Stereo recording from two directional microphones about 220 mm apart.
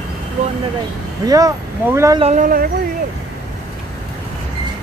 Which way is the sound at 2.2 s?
35° right (ahead or behind).